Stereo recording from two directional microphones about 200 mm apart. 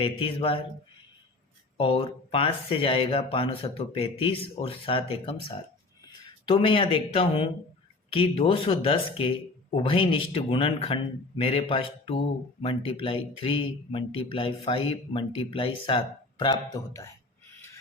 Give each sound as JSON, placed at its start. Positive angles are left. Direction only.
{"t": 0.0, "sound": "speech", "side_deg": 25}
{"t": 1.8, "sound": "speech", "side_deg": 25}